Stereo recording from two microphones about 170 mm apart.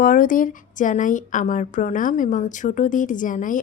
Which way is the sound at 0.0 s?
50° left (ahead or behind).